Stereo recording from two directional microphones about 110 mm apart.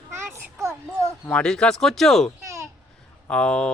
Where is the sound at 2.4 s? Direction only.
30° right (ahead or behind).